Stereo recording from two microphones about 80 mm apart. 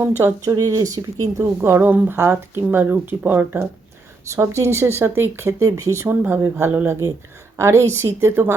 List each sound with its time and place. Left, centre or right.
0.0 s speech: right
1.4 s speech: right
4.3 s speech: right
5.6 s speech: right
6.1 s speech: right